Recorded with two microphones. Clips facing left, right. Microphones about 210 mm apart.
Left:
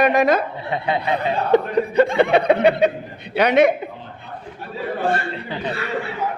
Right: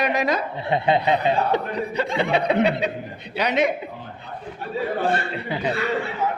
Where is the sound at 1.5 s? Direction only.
50° left (ahead or behind).